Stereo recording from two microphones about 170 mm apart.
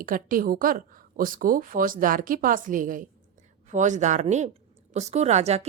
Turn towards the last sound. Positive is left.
turn(degrees=-40)  # may be behind; listen again after turning